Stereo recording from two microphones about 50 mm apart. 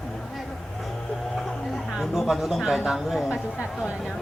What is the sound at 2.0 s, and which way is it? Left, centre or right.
Speech, centre.